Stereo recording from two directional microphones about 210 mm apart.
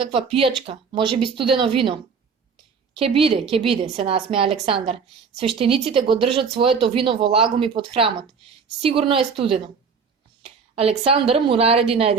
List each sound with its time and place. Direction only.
0.0 s speech: 25° right (ahead or behind)
3.0 s a woman's voice: 25° right (ahead or behind)